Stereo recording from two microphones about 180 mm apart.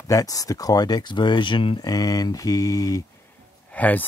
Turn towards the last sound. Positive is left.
turn(degrees=10)  # may be behind; listen again after turning